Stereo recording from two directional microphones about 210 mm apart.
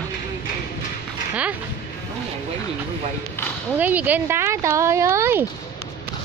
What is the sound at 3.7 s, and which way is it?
Speech, 10° right (ahead or behind).